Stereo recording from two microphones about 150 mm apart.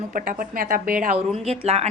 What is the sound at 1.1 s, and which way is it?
Speech, 45° right (ahead or behind).